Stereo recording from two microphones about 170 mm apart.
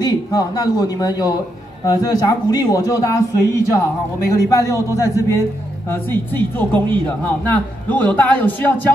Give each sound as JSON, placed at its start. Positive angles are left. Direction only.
{"t": 0.0, "sound": "speech", "side_deg": 20}